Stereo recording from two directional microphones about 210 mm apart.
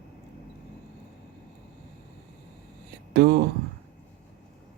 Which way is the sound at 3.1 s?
50° right (ahead or behind).